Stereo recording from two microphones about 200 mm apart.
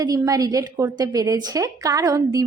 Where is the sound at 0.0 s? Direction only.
20° right (ahead or behind).